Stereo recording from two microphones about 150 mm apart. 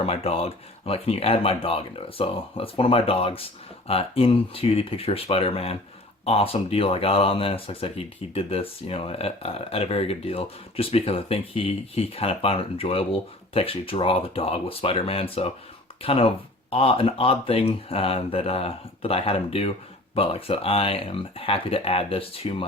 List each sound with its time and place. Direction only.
0.0 s speech: 40° left (ahead or behind)